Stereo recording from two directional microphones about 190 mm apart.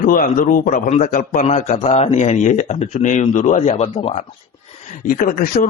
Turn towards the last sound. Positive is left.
turn(degrees=45)  # may be behind; listen again after turning